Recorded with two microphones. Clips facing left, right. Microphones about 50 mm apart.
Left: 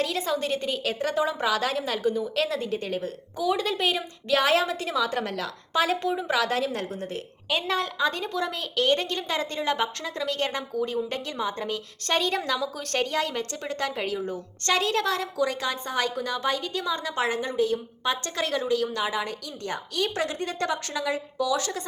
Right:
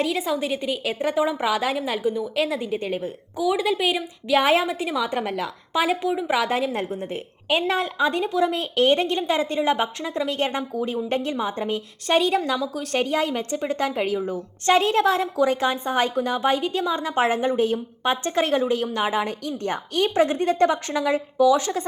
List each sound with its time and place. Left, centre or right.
0.0 s a woman's voice: centre
6.3 s a woman's voice: centre
12.0 s a woman's voice: centre
13.0 s a woman's voice: centre